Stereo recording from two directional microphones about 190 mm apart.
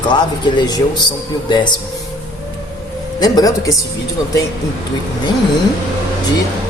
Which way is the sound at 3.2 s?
20° left (ahead or behind).